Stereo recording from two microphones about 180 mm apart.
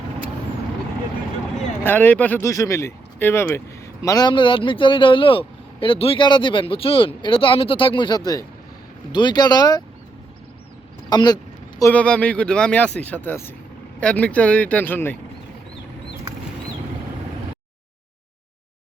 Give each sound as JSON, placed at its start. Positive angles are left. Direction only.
{"t": 1.8, "sound": "a man's voice", "side_deg": 10}
{"t": 11.1, "sound": "a man's voice", "side_deg": 20}
{"t": 11.8, "sound": "speech", "side_deg": 10}